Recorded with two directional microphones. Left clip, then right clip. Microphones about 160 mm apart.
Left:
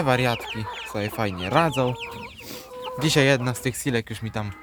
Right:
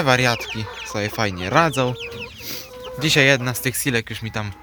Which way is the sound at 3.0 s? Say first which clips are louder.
Right 4 dB; 20° left (ahead or behind).